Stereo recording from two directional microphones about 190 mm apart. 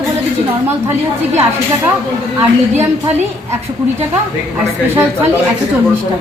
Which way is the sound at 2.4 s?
10° right (ahead or behind).